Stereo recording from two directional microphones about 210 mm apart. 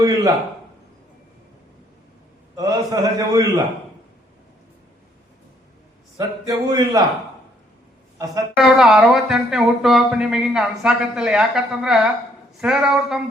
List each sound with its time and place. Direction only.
0.0 s a man's voice: 20° right (ahead or behind)
2.6 s a man's voice: 15° right (ahead or behind)
6.1 s a man's voice: 20° right (ahead or behind)
8.5 s speech: centre (ahead or behind)